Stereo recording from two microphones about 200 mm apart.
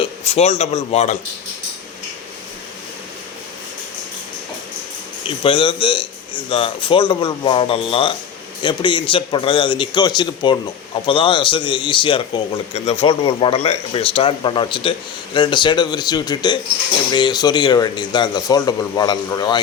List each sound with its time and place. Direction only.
0.0 s speech: 30° left (ahead or behind)
5.2 s speech: 25° left (ahead or behind)